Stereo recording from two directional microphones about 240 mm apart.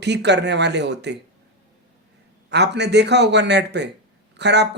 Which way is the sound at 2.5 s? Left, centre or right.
Right.